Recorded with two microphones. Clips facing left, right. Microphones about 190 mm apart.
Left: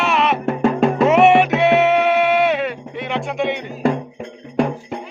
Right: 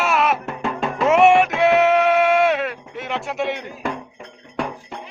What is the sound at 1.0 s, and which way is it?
Music, centre (ahead or behind).